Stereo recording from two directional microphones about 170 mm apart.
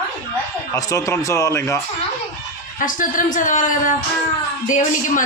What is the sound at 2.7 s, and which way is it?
Speech, 50° left (ahead or behind).